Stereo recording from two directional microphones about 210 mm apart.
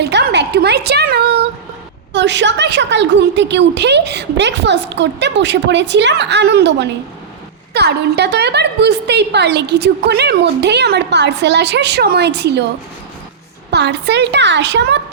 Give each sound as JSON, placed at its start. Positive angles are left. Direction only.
{"t": 0.0, "sound": "a sound", "side_deg": -55}
{"t": 2.1, "sound": "a woman's voice", "side_deg": -55}
{"t": 13.7, "sound": "a woman's voice", "side_deg": -55}